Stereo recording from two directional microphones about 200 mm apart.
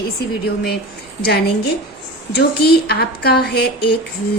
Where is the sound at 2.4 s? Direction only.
55° left (ahead or behind).